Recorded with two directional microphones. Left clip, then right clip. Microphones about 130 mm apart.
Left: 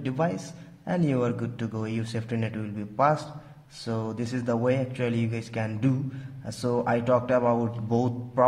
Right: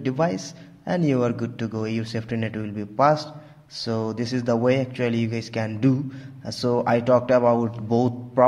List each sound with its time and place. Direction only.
0.0 s a man's voice: 25° right (ahead or behind)